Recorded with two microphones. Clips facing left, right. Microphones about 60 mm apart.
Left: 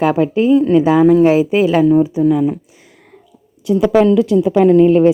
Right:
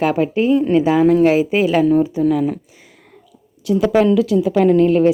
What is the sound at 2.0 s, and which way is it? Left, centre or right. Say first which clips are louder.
Speech: left 3 dB; centre.